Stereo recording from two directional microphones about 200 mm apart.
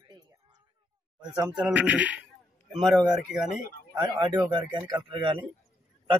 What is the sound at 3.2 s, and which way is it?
Speech, 5° right (ahead or behind).